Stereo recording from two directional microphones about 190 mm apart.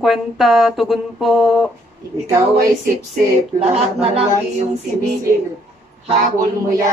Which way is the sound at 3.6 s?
30° right (ahead or behind).